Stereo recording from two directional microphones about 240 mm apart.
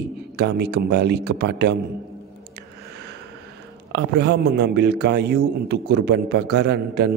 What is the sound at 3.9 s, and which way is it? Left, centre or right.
A man's voice, right.